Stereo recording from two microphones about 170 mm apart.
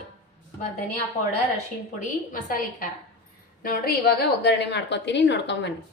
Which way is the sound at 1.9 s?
55° left (ahead or behind).